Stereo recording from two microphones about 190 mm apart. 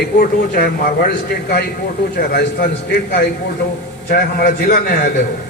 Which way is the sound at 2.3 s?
55° left (ahead or behind).